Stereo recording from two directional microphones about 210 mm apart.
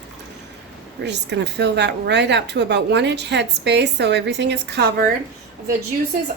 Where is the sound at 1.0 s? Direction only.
55° right (ahead or behind).